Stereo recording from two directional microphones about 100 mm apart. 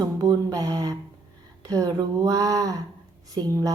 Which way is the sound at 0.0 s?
40° right (ahead or behind).